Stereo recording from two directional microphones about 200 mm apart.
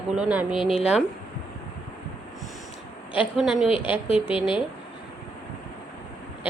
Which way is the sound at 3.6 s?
25° left (ahead or behind).